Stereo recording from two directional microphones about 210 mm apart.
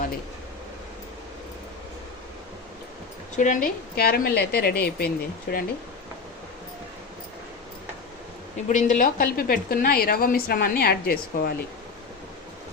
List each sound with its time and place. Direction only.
3.3 s a woman's voice: 35° left (ahead or behind)
8.7 s a woman's voice: 40° left (ahead or behind)